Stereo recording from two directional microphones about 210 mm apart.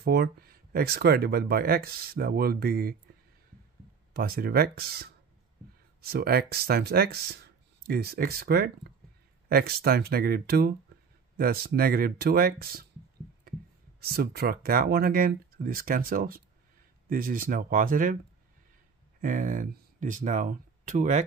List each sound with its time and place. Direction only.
0.0 s speech: 50° right (ahead or behind)
4.1 s speech: 45° right (ahead or behind)
19.2 s speech: 40° right (ahead or behind)